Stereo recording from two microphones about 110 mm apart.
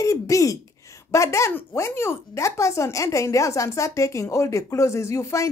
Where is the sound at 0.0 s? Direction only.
30° left (ahead or behind).